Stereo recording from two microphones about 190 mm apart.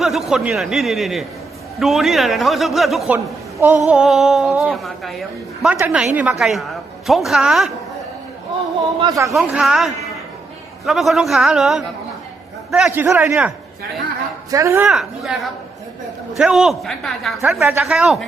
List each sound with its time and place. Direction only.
0.0 s a woman's voice: centre (ahead or behind)
5.7 s a man's voice: 10° right (ahead or behind)
9.0 s speech: 20° right (ahead or behind)
9.3 s a woman's voice: 5° right (ahead or behind)
14.5 s a man's voice: 15° right (ahead or behind)
14.8 s a woman's voice: centre (ahead or behind)
16.4 s a woman's voice: 5° right (ahead or behind)